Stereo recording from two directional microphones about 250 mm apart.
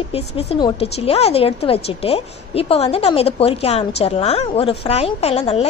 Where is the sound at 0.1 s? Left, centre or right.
Left.